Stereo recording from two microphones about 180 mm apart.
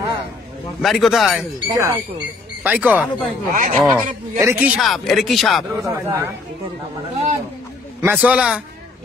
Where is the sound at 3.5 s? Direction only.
50° right (ahead or behind).